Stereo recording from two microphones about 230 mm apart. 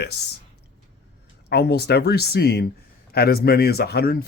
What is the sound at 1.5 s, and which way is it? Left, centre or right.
Speech, left.